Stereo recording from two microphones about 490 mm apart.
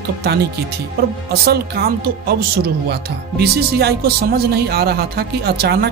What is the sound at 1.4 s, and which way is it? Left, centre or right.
Speech, centre.